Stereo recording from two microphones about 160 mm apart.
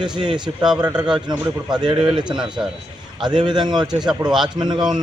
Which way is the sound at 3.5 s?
25° right (ahead or behind).